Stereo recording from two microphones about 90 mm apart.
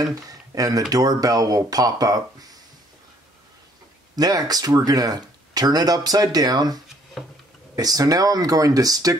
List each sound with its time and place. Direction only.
0.0 s speech: 40° right (ahead or behind)
4.1 s speech: 45° right (ahead or behind)